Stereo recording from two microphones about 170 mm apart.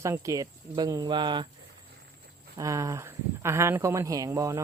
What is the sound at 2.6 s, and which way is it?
Speech, 20° right (ahead or behind).